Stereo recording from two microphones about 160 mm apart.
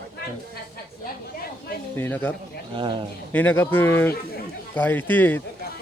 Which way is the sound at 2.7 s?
30° right (ahead or behind).